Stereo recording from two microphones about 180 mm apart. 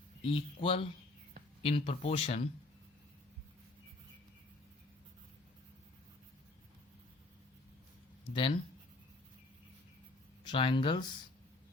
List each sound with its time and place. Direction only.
0.2 s speech: 30° left (ahead or behind)
8.3 s speech: 30° left (ahead or behind)
10.4 s speech: 25° left (ahead or behind)